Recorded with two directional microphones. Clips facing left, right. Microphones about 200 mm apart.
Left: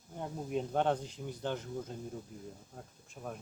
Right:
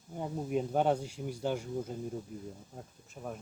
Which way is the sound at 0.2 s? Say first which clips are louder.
Right 3 dB; 10° right (ahead or behind).